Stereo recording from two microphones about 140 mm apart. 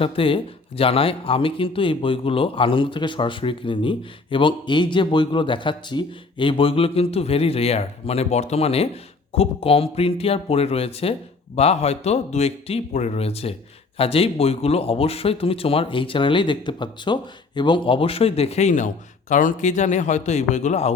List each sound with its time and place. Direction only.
0.0 s a man's voice: 40° left (ahead or behind)